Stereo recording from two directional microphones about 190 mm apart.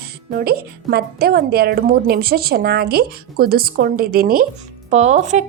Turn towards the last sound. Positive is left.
turn(degrees=-35)  # may be behind; listen again after turning